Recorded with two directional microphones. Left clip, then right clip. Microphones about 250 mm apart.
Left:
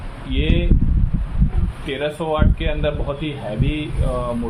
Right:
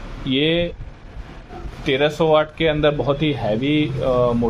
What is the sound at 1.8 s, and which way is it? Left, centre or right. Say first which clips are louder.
Speech: right 6 dB; right.